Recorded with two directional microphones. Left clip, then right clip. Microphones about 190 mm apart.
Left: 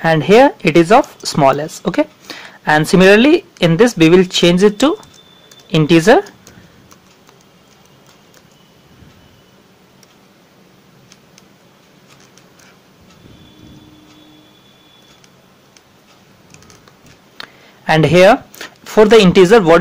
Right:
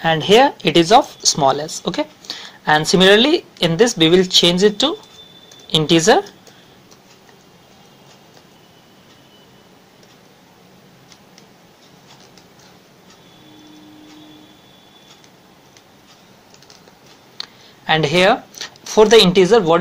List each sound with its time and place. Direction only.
0.0 s speech: 35° left (ahead or behind)
3.3 s a woman's voice: 65° left (ahead or behind)
3.7 s speech: 35° left (ahead or behind)
5.7 s speech: 60° left (ahead or behind)
5.9 s speech: 35° left (ahead or behind)
17.8 s speech: 45° left (ahead or behind)